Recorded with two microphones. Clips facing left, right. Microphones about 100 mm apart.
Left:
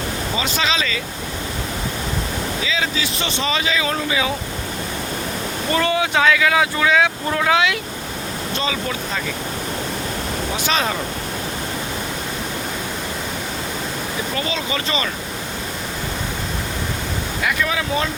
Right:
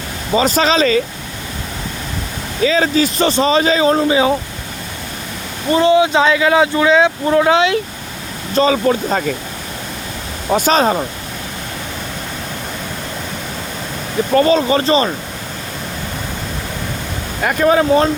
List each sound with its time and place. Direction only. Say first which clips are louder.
0.3 s speech: right 10 dB; 40° right (ahead or behind)
2.6 s speech: right 13 dB; 45° right (ahead or behind)
5.7 s speech: right 8 dB; 20° right (ahead or behind); by 9.3 s 45° right (ahead or behind)
10.5 s speech: right 10 dB; 40° right (ahead or behind)
14.3 s speech: right 15 dB; 45° right (ahead or behind)
17.4 s speech: right 10 dB; 45° right (ahead or behind)